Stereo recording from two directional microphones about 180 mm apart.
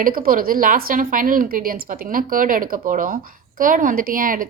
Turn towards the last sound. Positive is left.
turn(degrees=-50)  # may be behind; listen again after turning